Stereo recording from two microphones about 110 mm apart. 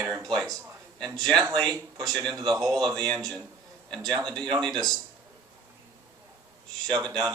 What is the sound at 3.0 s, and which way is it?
Speech, 5° left (ahead or behind).